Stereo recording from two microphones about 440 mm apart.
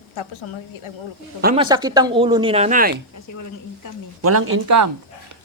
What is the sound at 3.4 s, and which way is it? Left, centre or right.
Speech, left.